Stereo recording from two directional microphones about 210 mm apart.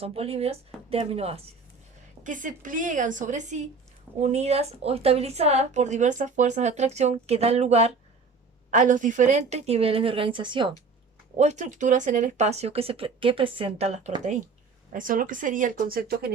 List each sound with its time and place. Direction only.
0.0 s a woman's voice: 30° right (ahead or behind)
2.2 s a woman's voice: 40° right (ahead or behind); by 10.7 s 20° right (ahead or behind)
11.3 s a woman's voice: 35° right (ahead or behind)